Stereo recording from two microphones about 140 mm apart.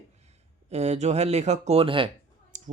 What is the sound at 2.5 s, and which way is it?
Clicking, 65° right (ahead or behind).